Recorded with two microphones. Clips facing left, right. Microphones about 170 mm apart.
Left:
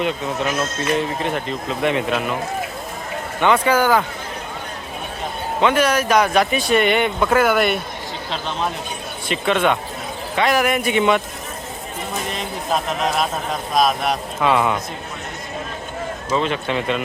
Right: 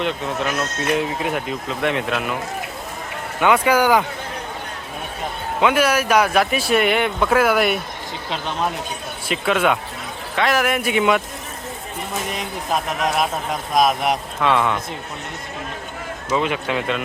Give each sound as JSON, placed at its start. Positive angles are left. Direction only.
{"t": 0.0, "sound": "speech", "side_deg": 0}
{"t": 3.4, "sound": "speech", "side_deg": -10}
{"t": 5.5, "sound": "speech", "side_deg": -10}
{"t": 12.3, "sound": "speech", "side_deg": -10}
{"t": 14.4, "sound": "a man's voice", "side_deg": 5}
{"t": 16.3, "sound": "speech", "side_deg": -10}